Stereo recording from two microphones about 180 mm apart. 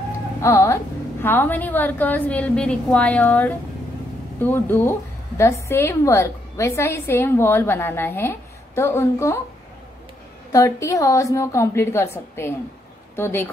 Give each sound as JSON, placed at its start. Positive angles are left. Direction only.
{"t": 0.4, "sound": "a woman's voice", "side_deg": 15}
{"t": 10.5, "sound": "a woman's voice", "side_deg": 20}